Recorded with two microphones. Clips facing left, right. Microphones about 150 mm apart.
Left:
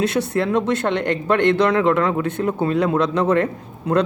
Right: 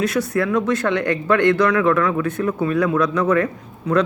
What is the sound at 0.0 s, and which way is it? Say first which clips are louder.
Speech: even; 25° left (ahead or behind).